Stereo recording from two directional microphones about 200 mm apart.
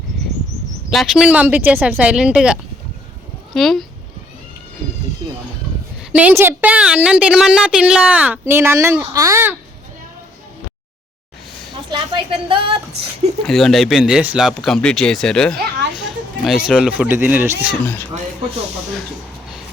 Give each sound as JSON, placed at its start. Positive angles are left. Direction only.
{"t": 0.9, "sound": "speech", "side_deg": 0}
{"t": 6.0, "sound": "a woman's voice", "side_deg": -5}
{"t": 11.9, "sound": "a woman's voice", "side_deg": -25}
{"t": 13.5, "sound": "speech", "side_deg": 0}